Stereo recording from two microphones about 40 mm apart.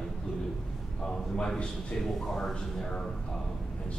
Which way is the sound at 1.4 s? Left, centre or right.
Left.